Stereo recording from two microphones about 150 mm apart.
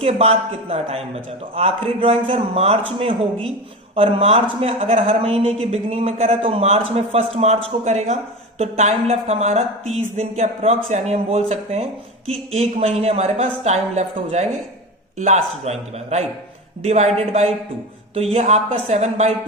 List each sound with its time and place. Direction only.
0.0 s a man's voice: 45° right (ahead or behind)